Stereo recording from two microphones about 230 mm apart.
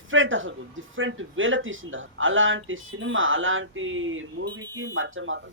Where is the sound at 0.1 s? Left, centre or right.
Right.